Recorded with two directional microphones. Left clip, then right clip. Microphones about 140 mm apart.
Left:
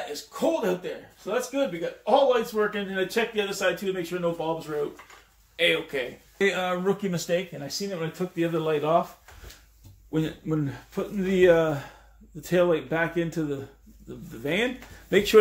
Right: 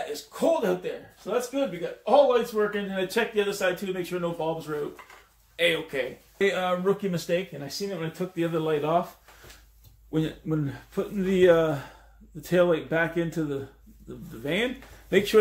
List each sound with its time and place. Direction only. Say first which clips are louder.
0.1 s speech: right 2 dB; 30° right (ahead or behind)
6.3 s speech: even; 25° left (ahead or behind); by 9.0 s 5° left (ahead or behind)
10.1 s speech: left 1 dB; 10° left (ahead or behind)
15.0 s speech: left 1 dB; 30° left (ahead or behind)